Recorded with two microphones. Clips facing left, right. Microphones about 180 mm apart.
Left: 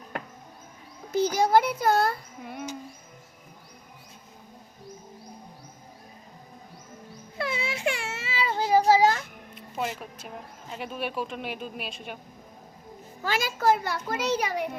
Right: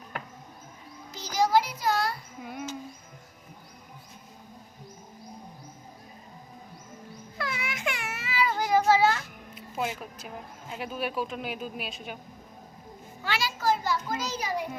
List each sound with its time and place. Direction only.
1.1 s a child's voice: 55° left (ahead or behind)
2.4 s speech: centre (ahead or behind)
7.3 s a sound: 25° left (ahead or behind)
9.6 s speech: centre (ahead or behind)
13.2 s a child's voice: 45° left (ahead or behind); by 14.7 s 65° left (ahead or behind)